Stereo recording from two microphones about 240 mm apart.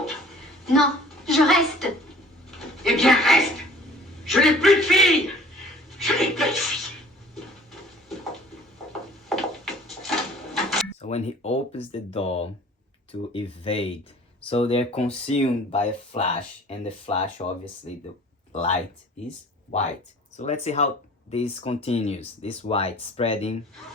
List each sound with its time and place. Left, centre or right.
0.6 s a woman's voice: centre
2.8 s a man's voice: centre
7.3 s a sound: centre
8.9 s wood: centre
10.5 s drawer open or close: centre
11.0 s speech: left
18.5 s speech: left